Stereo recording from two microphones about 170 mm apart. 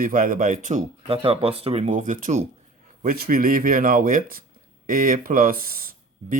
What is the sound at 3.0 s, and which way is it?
Speech, 60° right (ahead or behind).